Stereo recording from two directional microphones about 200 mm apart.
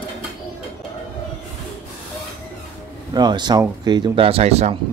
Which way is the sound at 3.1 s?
20° right (ahead or behind).